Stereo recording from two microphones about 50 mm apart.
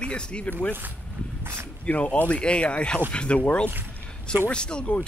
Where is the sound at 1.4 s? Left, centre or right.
Right.